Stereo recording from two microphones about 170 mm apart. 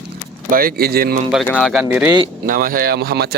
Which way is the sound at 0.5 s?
60° right (ahead or behind).